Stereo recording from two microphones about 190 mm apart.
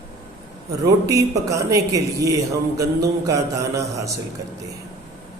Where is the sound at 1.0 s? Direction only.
15° right (ahead or behind).